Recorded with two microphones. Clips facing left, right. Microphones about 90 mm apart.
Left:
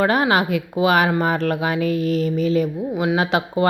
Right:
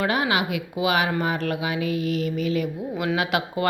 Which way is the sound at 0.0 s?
40° left (ahead or behind).